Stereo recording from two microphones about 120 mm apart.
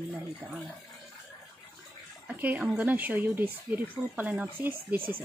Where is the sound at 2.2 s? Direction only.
15° right (ahead or behind).